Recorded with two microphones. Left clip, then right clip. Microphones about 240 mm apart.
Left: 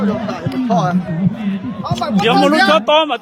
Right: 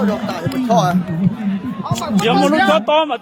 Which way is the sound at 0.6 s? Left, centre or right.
Right.